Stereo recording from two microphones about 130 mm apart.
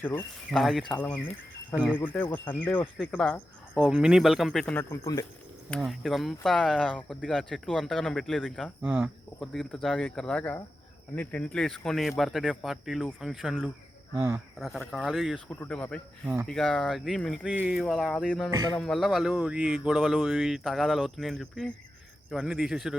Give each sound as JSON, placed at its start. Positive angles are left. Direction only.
{"t": 0.0, "sound": "speech", "side_deg": 15}
{"t": 0.5, "sound": "speech", "side_deg": 0}
{"t": 1.7, "sound": "speech", "side_deg": -10}
{"t": 2.0, "sound": "speech", "side_deg": 15}
{"t": 3.8, "sound": "speech", "side_deg": -5}
{"t": 4.6, "sound": "speech", "side_deg": 10}
{"t": 4.9, "sound": "speech", "side_deg": 25}
{"t": 5.8, "sound": "speech", "side_deg": 0}
{"t": 8.8, "sound": "speech", "side_deg": -10}
{"t": 9.4, "sound": "speech", "side_deg": 5}
{"t": 14.2, "sound": "speech", "side_deg": -20}
{"t": 14.8, "sound": "speech", "side_deg": 0}
{"t": 15.4, "sound": "speech", "side_deg": 15}
{"t": 17.4, "sound": "speech", "side_deg": -10}